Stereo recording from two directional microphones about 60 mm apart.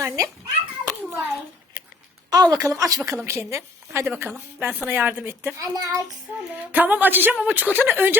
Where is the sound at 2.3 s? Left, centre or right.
Right.